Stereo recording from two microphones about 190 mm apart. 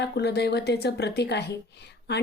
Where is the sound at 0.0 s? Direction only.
60° left (ahead or behind).